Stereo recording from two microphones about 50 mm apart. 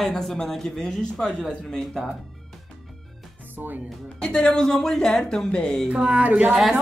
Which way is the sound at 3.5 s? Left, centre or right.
Right.